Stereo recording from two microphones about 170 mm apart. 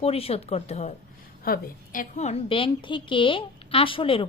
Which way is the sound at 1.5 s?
55° left (ahead or behind).